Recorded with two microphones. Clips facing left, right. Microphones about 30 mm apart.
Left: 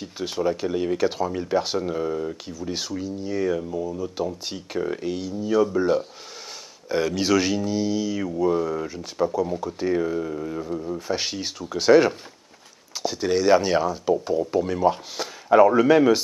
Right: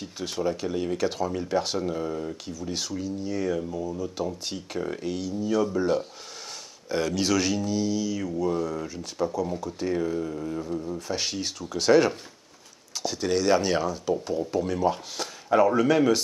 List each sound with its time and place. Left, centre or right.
0.0 s speech: centre